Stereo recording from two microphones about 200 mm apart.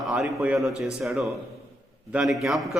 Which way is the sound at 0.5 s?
Centre (ahead or behind).